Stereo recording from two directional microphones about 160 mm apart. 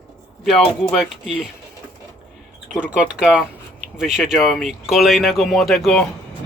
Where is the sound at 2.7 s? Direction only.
5° right (ahead or behind).